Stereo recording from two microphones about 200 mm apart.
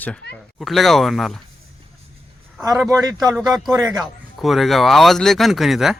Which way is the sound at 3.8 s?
Centre (ahead or behind).